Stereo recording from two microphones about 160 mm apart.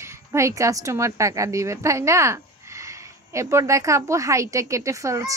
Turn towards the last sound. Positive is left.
turn(degrees=-20)  # may be behind; listen again after turning